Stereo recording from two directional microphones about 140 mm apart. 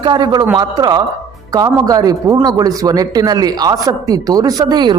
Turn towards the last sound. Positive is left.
turn(degrees=-30)  # may be behind; listen again after turning